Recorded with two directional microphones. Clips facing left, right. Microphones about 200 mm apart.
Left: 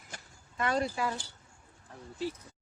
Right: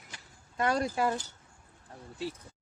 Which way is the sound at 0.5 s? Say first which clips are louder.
Right 2 dB; 45° right (ahead or behind).